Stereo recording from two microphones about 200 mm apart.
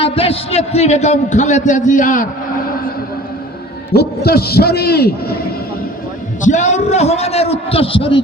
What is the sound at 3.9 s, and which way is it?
A man's voice, 50° left (ahead or behind).